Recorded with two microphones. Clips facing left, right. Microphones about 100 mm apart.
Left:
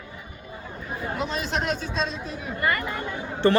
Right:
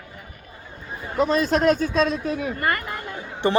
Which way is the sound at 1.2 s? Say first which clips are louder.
Right 10 dB; 40° right (ahead or behind).